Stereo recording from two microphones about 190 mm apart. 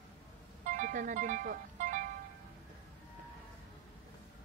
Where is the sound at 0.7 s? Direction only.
45° right (ahead or behind).